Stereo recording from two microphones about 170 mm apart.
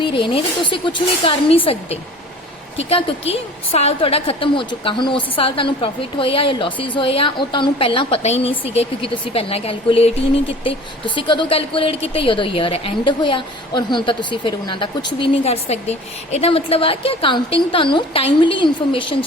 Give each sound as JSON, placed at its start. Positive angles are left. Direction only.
{"t": 0.0, "sound": "a woman's voice", "side_deg": 30}